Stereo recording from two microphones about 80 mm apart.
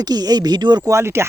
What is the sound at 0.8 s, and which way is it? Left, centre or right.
Speech, right.